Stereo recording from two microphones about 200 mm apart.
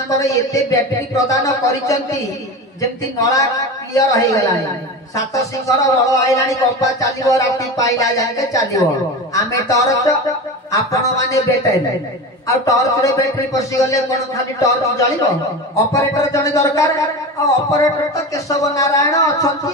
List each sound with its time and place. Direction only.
0.1 s a man's voice: 15° left (ahead or behind)
3.2 s a man's voice: 15° left (ahead or behind)
12.4 s a man's voice: 15° left (ahead or behind)